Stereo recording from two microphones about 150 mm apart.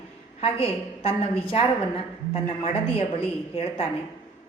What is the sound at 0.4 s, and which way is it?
A woman's voice, 40° left (ahead or behind).